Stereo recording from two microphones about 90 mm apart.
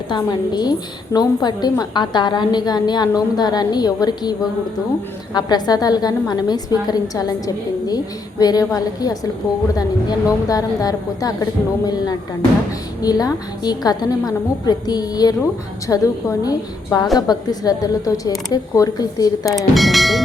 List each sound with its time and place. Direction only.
0.1 s a woman's voice: 50° left (ahead or behind)
13.0 s a woman's voice: 45° left (ahead or behind)
19.5 s speech: centre (ahead or behind)